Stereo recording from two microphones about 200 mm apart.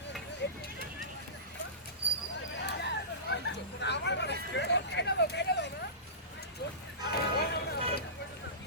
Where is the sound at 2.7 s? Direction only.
60° left (ahead or behind).